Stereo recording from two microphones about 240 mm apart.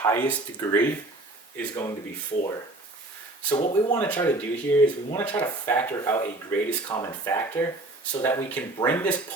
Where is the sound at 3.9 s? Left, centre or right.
Centre.